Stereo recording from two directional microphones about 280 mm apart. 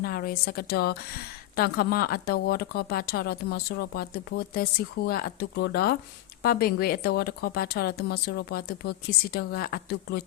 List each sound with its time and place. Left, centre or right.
0.0 s a woman's voice: left